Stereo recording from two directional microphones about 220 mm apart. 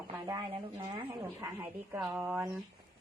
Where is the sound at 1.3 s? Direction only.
10° right (ahead or behind).